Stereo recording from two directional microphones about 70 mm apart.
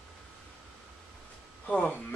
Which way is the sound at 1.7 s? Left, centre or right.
Centre.